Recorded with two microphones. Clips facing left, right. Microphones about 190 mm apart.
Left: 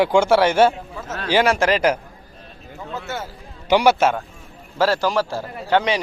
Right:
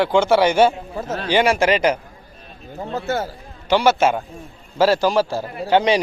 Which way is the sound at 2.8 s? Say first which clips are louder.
Right 6 dB; 40° right (ahead or behind).